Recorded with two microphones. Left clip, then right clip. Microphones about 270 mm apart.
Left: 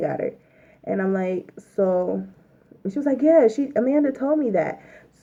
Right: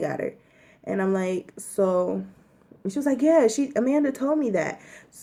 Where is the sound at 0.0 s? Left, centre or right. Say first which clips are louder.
Left 3 dB; right.